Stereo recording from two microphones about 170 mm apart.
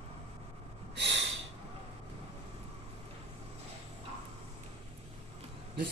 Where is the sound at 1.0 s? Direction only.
90° right.